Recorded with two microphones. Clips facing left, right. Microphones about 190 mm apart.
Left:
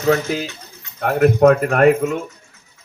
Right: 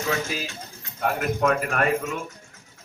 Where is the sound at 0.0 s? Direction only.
55° left (ahead or behind).